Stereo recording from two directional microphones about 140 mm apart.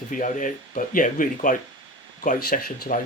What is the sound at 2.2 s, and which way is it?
Speech, 85° left.